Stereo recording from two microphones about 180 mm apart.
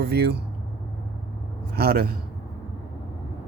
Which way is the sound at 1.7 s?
60° right (ahead or behind).